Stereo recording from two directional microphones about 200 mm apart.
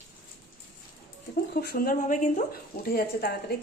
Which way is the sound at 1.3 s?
50° left (ahead or behind).